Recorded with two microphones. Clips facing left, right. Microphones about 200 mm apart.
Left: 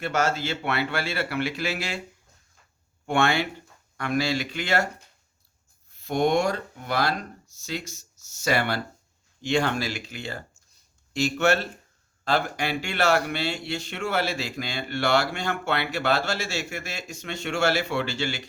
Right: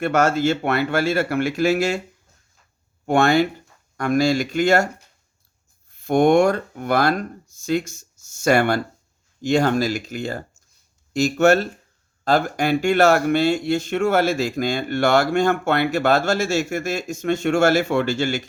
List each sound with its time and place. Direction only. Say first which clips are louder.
0.0 s speech: right 7 dB; 55° right (ahead or behind)
3.1 s speech: right 7 dB; 40° right (ahead or behind)
6.0 s speech: right 8 dB; 50° right (ahead or behind)